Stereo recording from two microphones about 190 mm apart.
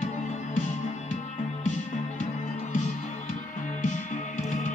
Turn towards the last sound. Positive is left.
turn(degrees=40)  # may be behind; listen again after turning